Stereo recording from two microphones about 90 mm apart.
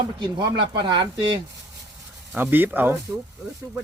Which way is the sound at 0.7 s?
60° right (ahead or behind).